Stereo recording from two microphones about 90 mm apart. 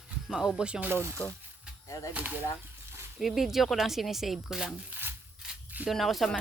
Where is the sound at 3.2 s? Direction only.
5° right (ahead or behind).